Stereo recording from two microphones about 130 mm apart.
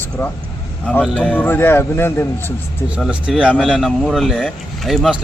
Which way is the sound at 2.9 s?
10° right (ahead or behind).